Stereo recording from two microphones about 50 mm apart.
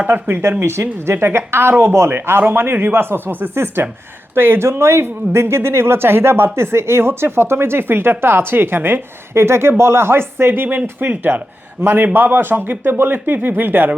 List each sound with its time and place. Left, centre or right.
0.0 s speech: right
0.6 s speech: right